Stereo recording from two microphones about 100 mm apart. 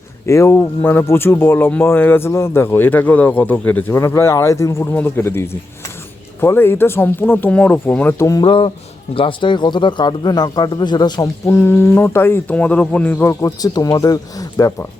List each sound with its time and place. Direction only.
0.3 s speech: 30° left (ahead or behind)
8.4 s speech: 65° left (ahead or behind)
9.1 s speech: 55° left (ahead or behind)
11.4 s speech: 25° left (ahead or behind)
13.4 s speech: 40° left (ahead or behind)